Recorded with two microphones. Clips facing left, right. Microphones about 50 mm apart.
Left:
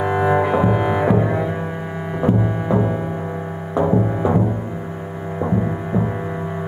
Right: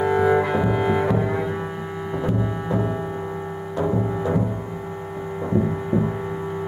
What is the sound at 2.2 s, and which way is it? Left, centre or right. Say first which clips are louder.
Music: left 8 dB; left.